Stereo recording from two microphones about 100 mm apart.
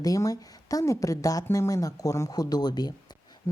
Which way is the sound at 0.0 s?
35° left (ahead or behind).